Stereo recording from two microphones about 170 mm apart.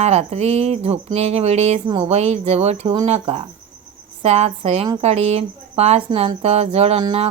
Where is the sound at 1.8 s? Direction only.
25° right (ahead or behind).